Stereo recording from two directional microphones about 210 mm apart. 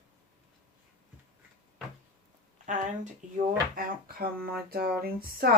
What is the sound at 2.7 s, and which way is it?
Speech, 35° right (ahead or behind).